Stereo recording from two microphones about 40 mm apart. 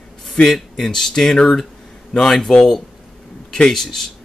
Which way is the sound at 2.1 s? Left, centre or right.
Centre.